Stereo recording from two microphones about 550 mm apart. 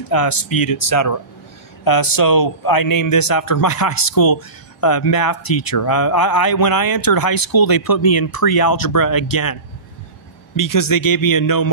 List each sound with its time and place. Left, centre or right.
0.1 s speech: left